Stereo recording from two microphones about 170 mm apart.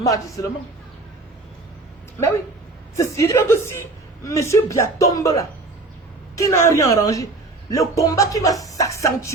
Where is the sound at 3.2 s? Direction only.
15° left (ahead or behind).